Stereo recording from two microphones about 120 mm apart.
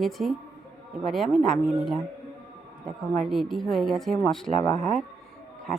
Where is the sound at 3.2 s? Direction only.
Centre (ahead or behind).